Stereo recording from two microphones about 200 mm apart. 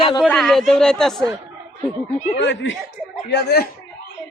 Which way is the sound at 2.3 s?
65° left (ahead or behind).